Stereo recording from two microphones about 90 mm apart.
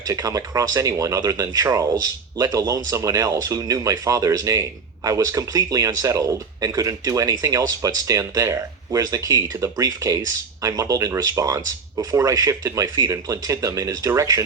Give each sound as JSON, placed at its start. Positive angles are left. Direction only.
{"t": 0.1, "sound": "speech", "side_deg": -40}